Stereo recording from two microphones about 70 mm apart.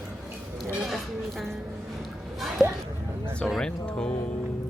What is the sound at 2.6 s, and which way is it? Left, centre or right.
Speech, centre.